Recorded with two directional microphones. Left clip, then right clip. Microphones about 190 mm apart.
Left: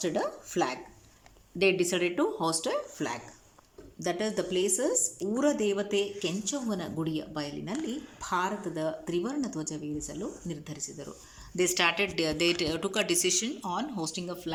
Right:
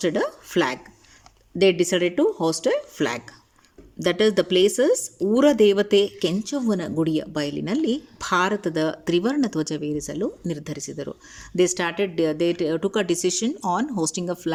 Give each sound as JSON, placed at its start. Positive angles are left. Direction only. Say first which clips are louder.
{"t": 0.0, "sound": "speech", "louder": "right 7 dB", "side_deg": -40}
{"t": 11.5, "sound": "speech", "louder": "right 4 dB", "side_deg": -55}